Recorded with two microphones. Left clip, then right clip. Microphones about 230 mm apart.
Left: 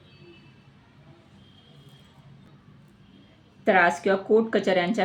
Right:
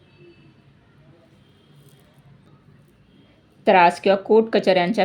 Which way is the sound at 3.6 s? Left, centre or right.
Right.